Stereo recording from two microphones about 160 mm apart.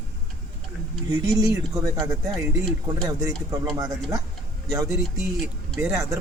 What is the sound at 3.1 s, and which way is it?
Speech, 20° right (ahead or behind).